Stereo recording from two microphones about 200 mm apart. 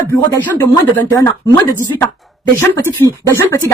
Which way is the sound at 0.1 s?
10° left (ahead or behind).